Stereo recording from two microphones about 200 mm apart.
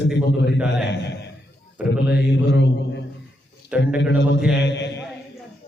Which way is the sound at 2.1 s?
60° left (ahead or behind).